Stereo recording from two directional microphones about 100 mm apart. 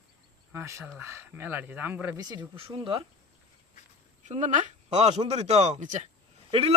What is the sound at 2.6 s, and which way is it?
Speech, 60° right (ahead or behind).